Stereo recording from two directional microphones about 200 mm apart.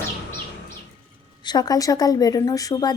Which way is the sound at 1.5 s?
20° left (ahead or behind).